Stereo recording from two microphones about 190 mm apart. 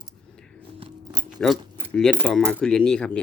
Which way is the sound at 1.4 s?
5° left (ahead or behind).